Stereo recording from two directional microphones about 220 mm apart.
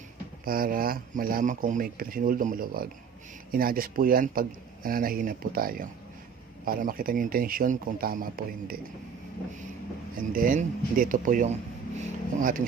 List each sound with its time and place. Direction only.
0.4 s speech: 40° right (ahead or behind)
10.2 s speech: 40° right (ahead or behind)